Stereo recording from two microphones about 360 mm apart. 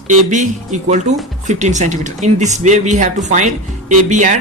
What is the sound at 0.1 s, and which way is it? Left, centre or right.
Speech, centre.